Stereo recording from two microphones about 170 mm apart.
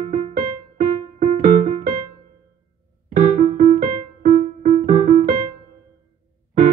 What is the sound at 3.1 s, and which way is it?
Keyboard, 50° right (ahead or behind).